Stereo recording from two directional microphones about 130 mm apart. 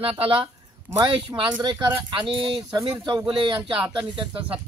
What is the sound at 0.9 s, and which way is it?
A man's voice, 35° right (ahead or behind).